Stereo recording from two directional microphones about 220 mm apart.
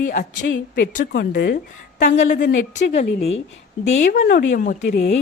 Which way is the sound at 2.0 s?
35° left (ahead or behind).